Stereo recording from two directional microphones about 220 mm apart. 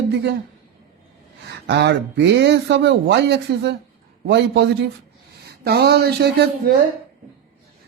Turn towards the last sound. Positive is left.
turn(degrees=-45)  # may be behind; listen again after turning